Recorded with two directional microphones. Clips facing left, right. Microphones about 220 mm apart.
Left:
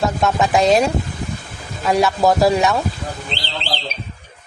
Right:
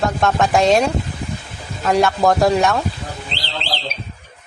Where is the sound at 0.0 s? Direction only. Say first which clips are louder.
Even; centre (ahead or behind).